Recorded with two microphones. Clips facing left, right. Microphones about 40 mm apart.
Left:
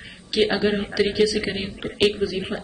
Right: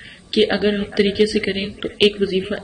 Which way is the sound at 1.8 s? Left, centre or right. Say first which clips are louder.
Right 4 dB; right.